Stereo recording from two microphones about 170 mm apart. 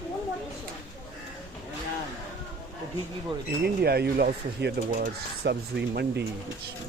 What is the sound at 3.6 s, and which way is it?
Speech, 70° right (ahead or behind).